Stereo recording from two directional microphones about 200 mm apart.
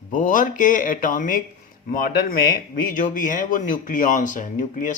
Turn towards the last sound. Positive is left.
turn(degrees=40)  # may be behind; listen again after turning